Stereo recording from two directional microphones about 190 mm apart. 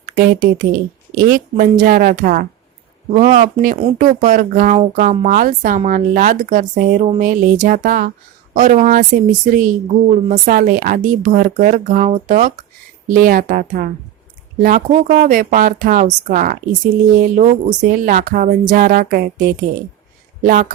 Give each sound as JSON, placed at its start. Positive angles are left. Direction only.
{"t": 0.6, "sound": "a woman's voice", "side_deg": -50}
{"t": 20.4, "sound": "a woman's voice", "side_deg": -45}